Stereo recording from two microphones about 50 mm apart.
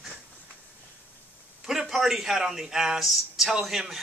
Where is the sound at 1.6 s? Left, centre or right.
Centre.